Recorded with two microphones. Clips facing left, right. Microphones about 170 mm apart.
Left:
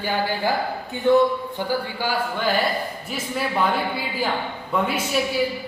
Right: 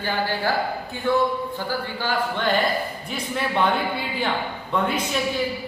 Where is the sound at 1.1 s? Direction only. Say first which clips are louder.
Left 5 dB; 20° left (ahead or behind).